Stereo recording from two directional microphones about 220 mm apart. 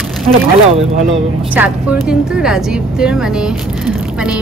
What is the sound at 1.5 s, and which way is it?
Speech, 5° right (ahead or behind).